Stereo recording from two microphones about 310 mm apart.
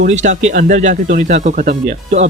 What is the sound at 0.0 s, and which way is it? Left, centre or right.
Speech, right.